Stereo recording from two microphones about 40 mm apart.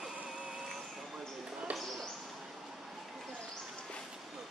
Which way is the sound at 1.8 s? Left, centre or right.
Centre.